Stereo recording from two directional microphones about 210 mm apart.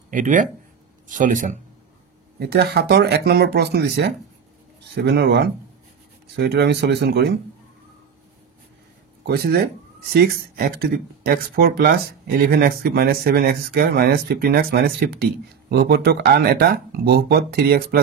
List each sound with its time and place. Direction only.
0.1 s speech: 40° right (ahead or behind)
2.3 s speech: 50° right (ahead or behind)
9.2 s speech: 45° right (ahead or behind)